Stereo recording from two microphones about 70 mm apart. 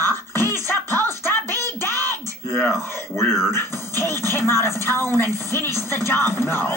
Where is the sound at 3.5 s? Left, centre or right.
Left.